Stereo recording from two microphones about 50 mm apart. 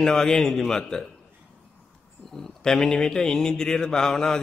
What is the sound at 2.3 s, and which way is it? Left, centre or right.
A man's voice, centre.